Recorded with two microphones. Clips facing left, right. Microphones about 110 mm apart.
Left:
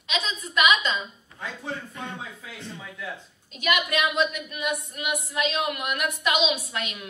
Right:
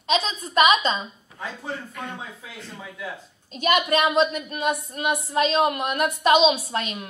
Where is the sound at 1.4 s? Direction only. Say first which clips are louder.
Right 1 dB; centre (ahead or behind).